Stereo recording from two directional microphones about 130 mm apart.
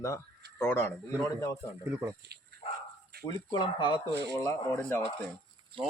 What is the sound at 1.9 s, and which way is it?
Speech, 20° right (ahead or behind).